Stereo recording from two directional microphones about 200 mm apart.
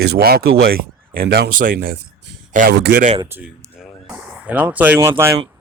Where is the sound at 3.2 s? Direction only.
10° right (ahead or behind).